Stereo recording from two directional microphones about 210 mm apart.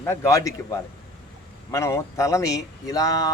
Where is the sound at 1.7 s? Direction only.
15° left (ahead or behind).